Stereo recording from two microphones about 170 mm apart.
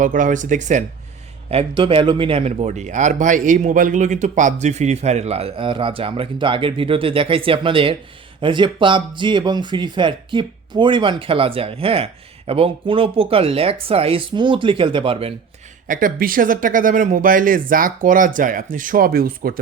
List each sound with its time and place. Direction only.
0.0 s speech: 50° right (ahead or behind)
1.5 s speech: 35° right (ahead or behind)
15.9 s speech: 55° right (ahead or behind)